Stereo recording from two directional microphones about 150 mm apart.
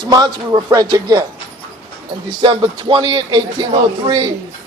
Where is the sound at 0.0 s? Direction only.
25° right (ahead or behind).